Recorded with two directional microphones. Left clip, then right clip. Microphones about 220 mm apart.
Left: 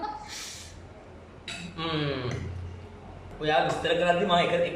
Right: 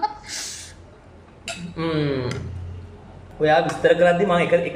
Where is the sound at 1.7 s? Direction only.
30° right (ahead or behind).